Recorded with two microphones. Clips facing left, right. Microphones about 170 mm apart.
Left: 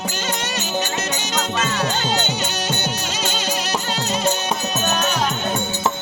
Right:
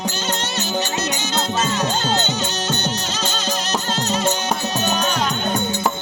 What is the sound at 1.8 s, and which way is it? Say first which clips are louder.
Music: right 1 dB; 10° left (ahead or behind).